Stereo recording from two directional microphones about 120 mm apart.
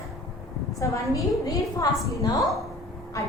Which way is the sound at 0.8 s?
25° left (ahead or behind).